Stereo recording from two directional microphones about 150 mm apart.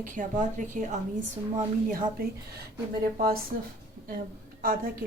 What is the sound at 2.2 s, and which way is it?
Speech, 85° right.